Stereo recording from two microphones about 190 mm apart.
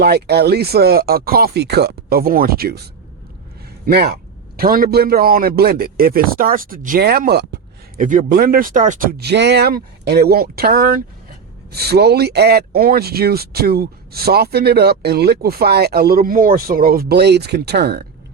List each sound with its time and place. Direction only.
0.0 s speech: 60° right (ahead or behind)
3.8 s speech: 55° right (ahead or behind)
7.9 s speech: 45° right (ahead or behind)